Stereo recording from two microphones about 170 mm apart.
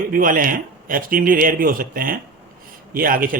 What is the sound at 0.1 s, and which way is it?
Speech, 55° right (ahead or behind).